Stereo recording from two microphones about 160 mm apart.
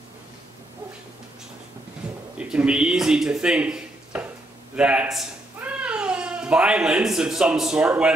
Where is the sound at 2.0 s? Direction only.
5° right (ahead or behind).